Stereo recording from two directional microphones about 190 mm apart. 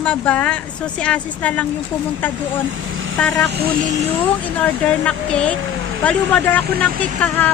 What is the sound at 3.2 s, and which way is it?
Speech, 5° left (ahead or behind).